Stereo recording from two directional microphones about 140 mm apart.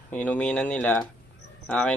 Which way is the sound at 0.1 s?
10° left (ahead or behind).